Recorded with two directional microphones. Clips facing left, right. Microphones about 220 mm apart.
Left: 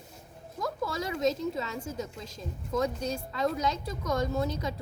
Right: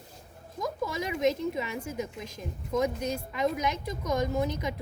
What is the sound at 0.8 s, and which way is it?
A woman's voice, 15° right (ahead or behind).